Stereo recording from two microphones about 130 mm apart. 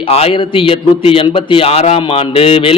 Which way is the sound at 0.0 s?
45° left (ahead or behind).